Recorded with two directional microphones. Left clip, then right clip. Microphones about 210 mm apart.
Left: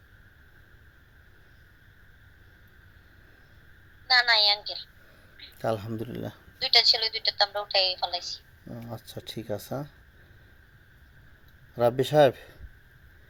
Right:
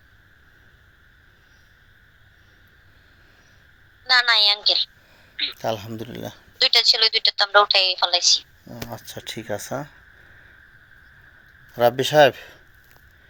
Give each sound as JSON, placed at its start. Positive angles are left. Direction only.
{"t": 4.0, "sound": "a sound", "side_deg": -45}
{"t": 5.5, "sound": "speech", "side_deg": 15}
{"t": 6.6, "sound": "a woman's voice", "side_deg": -40}
{"t": 11.8, "sound": "speech", "side_deg": 10}